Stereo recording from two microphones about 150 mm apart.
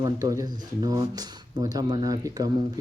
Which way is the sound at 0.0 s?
20° right (ahead or behind).